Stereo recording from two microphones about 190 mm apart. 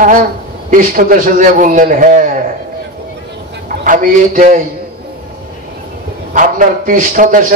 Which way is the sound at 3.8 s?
45° right (ahead or behind).